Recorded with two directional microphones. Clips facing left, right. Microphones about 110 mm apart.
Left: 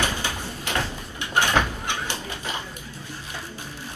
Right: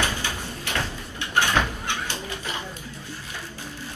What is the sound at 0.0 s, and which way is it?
Sliding door, 15° left (ahead or behind).